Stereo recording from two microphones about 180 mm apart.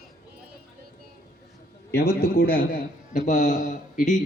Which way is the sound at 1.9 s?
60° left (ahead or behind).